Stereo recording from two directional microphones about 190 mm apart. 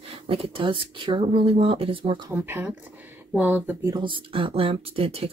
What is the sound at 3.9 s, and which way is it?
Speech, 25° right (ahead or behind).